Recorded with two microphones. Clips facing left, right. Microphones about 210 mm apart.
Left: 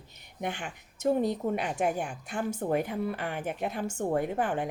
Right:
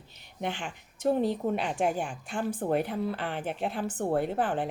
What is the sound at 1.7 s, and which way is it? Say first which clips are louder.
Speech: right 1 dB; 10° left (ahead or behind).